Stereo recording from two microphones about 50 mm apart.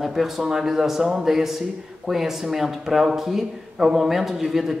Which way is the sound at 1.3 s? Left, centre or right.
Centre.